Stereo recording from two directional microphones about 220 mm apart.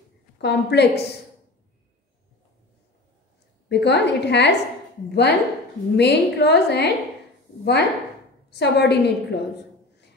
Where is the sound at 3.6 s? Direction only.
50° left (ahead or behind).